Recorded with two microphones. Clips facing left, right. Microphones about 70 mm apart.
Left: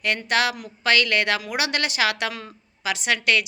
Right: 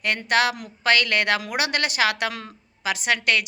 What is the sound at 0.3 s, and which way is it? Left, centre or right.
A woman's voice, right.